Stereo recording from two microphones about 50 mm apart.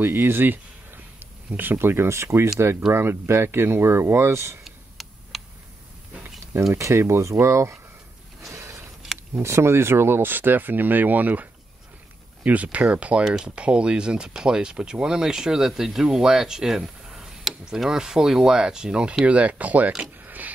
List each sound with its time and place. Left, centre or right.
0.0 s a sound: right
1.5 s speech: right
2.0 s speech: right
4.6 s a sound: centre
6.8 s speech: right
8.5 s vehicle: right
9.3 s speech: right
12.4 s speech: right
19.9 s a sound: right